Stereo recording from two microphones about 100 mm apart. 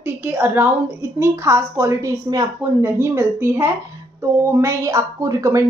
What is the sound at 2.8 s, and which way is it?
A woman's voice, 25° right (ahead or behind).